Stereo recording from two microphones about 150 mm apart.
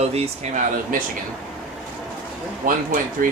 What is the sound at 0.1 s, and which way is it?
Speech, 45° right (ahead or behind).